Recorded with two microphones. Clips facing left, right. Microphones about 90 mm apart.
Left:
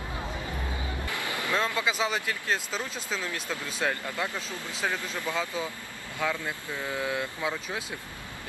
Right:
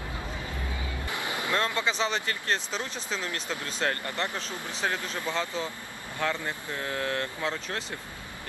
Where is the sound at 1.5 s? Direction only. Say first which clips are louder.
Even; 15° left (ahead or behind).